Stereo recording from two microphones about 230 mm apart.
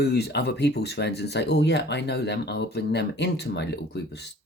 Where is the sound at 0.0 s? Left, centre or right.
Left.